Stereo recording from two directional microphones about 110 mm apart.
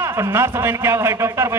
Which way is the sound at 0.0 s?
25° right (ahead or behind).